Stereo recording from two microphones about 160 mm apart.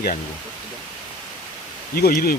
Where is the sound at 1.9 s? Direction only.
70° left (ahead or behind).